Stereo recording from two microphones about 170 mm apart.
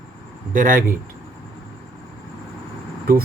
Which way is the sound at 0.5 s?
50° right (ahead or behind).